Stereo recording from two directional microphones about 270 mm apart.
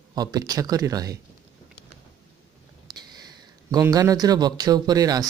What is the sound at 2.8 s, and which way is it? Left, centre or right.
Speech, centre.